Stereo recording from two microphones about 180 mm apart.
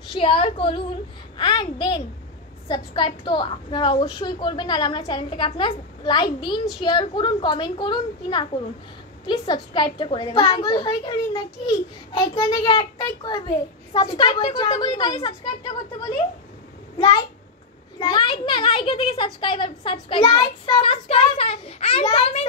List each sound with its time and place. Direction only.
0.1 s a woman's voice: 30° left (ahead or behind)
17.9 s a woman's voice: 25° left (ahead or behind)